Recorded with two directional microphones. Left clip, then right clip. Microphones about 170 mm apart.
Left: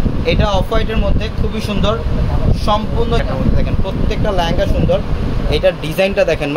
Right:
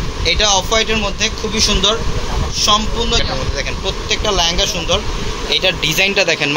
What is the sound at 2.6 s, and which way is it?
Speech, 60° left (ahead or behind).